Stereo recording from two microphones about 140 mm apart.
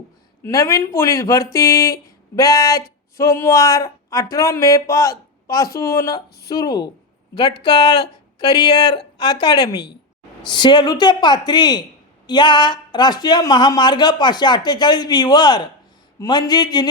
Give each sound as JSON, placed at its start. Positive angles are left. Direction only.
{"t": 0.4, "sound": "a woman's voice", "side_deg": 25}